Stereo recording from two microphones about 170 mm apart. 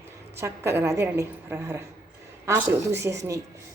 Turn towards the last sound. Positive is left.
turn(degrees=-15)  # may be behind; listen again after turning